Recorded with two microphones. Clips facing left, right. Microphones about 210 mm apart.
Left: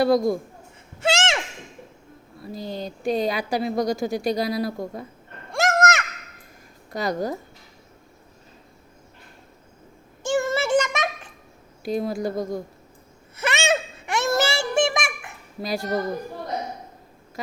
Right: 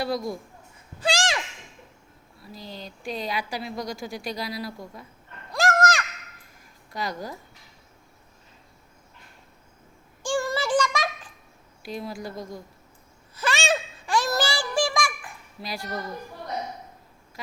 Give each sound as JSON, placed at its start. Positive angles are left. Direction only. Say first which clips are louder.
{"t": 0.0, "sound": "speech", "louder": "left 9 dB", "side_deg": 45}
{"t": 0.9, "sound": "a sound", "louder": "left 3 dB", "side_deg": 25}
{"t": 2.4, "sound": "speech", "louder": "left 9 dB", "side_deg": 50}
{"t": 5.5, "sound": "a sound", "louder": "left 2 dB", "side_deg": 25}
{"t": 6.9, "sound": "speech", "louder": "left 7 dB", "side_deg": 45}
{"t": 10.2, "sound": "child singing", "louder": "left 3 dB", "side_deg": 25}
{"t": 11.9, "sound": "speech", "louder": "left 9 dB", "side_deg": 45}
{"t": 13.3, "sound": "a sound", "louder": "left 3 dB", "side_deg": 20}
{"t": 15.6, "sound": "speech", "louder": "left 8 dB", "side_deg": 40}